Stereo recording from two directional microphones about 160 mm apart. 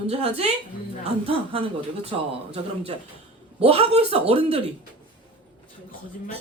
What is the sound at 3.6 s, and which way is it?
Speech, 40° right (ahead or behind).